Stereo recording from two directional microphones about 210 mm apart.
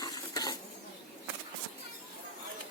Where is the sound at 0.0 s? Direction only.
20° left (ahead or behind).